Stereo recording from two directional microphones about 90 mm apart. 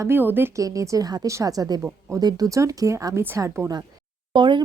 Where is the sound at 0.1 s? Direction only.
25° right (ahead or behind).